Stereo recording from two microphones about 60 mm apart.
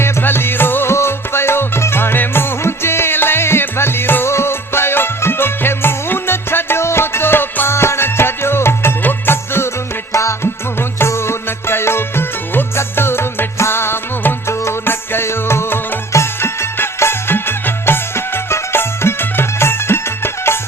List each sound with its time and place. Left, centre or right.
0.0 s music: left
10.1 s music: left